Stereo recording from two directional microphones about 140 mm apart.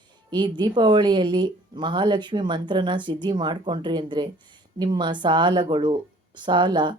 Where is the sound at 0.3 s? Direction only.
35° right (ahead or behind).